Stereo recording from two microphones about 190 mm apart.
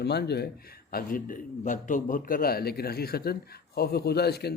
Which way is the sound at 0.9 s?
50° left (ahead or behind).